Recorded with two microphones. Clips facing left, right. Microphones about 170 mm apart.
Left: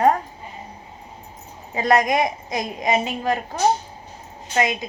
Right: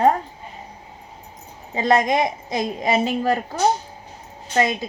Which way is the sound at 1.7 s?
25° right (ahead or behind).